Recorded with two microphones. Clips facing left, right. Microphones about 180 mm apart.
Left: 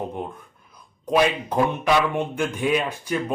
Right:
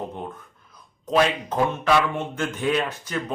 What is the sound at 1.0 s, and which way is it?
A man's voice, 10° left (ahead or behind).